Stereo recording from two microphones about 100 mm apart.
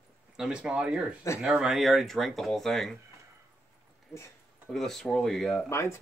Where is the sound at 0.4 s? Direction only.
10° right (ahead or behind).